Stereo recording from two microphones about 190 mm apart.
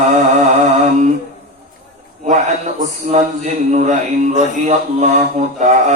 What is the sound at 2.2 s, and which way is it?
Mantra, 40° right (ahead or behind).